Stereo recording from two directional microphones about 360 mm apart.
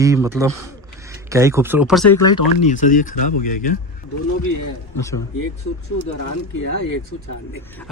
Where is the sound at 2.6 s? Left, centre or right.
Left.